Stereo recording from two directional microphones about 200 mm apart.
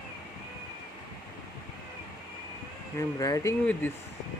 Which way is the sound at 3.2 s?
15° left (ahead or behind).